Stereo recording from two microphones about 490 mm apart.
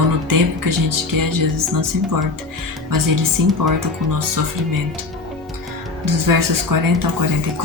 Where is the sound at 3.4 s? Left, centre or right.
Right.